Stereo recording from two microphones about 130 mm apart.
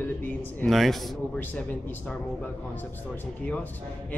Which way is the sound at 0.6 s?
Centre (ahead or behind).